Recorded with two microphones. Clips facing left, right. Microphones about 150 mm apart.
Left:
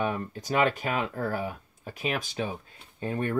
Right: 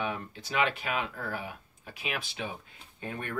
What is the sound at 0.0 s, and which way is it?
Speech, 45° left (ahead or behind).